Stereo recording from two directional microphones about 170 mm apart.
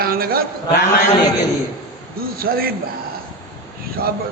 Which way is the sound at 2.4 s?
60° right (ahead or behind).